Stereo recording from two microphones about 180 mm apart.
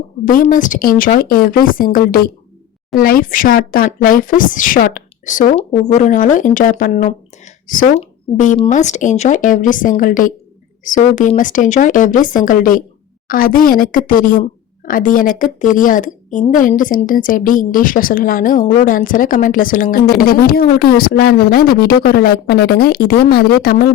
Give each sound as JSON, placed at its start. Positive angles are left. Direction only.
{"t": 0.3, "sound": "a woman's voice", "side_deg": 50}